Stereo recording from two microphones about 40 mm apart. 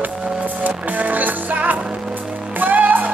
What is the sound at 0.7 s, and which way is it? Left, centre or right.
Music, right.